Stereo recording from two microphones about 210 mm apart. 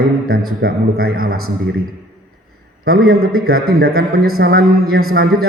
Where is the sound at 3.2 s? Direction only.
90° right.